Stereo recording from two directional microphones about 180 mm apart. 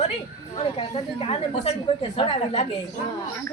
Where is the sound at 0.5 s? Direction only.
30° left (ahead or behind).